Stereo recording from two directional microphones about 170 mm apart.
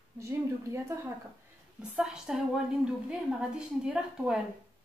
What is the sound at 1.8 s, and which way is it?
A woman's voice, 5° right (ahead or behind).